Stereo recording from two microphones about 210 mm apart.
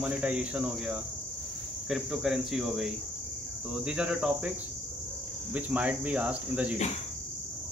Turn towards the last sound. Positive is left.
turn(degrees=-5)  # may be behind; listen again after turning